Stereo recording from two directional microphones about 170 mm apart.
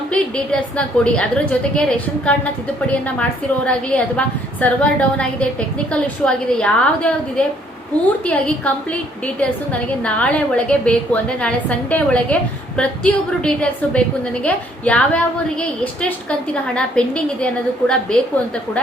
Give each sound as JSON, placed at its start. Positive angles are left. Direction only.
{"t": 0.1, "sound": "a woman's voice", "side_deg": 5}